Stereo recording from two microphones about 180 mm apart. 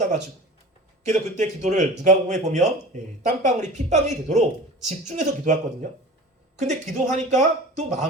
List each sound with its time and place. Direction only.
1.0 s a man's voice: 40° right (ahead or behind)
6.6 s a man's voice: 40° right (ahead or behind)